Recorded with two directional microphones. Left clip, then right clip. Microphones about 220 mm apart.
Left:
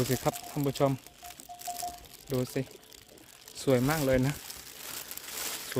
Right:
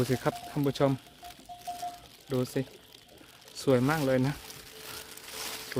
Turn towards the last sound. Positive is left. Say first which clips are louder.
# left 1 dB
turn(degrees=50)  # may be behind; listen again after turning